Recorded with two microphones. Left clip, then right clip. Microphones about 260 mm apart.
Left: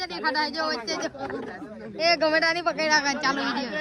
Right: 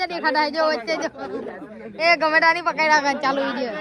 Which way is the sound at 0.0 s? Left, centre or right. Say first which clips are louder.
Right 5 dB; centre.